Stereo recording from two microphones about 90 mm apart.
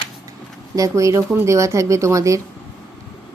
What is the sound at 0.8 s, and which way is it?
A woman's voice, 35° right (ahead or behind).